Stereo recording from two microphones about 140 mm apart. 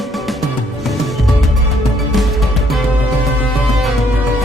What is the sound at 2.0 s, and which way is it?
Music, centre (ahead or behind).